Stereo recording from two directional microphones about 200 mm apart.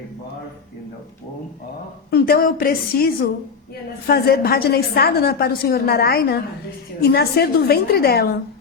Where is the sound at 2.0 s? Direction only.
50° left (ahead or behind).